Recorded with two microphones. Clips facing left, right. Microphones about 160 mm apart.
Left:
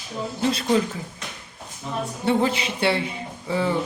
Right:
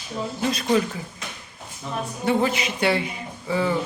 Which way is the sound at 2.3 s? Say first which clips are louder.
Even; 30° left (ahead or behind).